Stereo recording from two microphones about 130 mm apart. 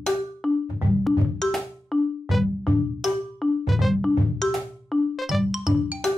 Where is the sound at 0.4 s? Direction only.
Centre (ahead or behind).